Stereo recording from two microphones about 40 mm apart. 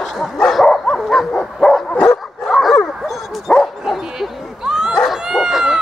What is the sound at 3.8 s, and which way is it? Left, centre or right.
Bow-wow, centre.